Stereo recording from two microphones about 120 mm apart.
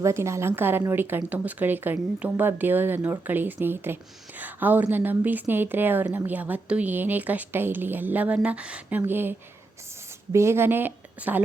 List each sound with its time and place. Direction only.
0.0 s a woman's voice: 25° right (ahead or behind)
10.3 s a woman's voice: 20° right (ahead or behind)